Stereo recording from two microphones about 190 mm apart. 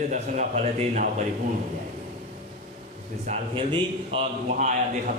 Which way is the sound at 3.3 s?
30° right (ahead or behind).